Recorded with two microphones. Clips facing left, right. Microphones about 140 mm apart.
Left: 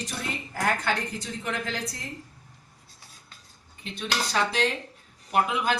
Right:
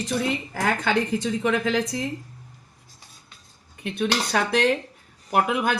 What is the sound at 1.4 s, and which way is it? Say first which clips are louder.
Speech: right 7 dB; 90° right.